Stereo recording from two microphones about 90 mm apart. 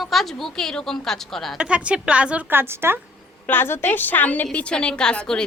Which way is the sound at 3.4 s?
25° left (ahead or behind).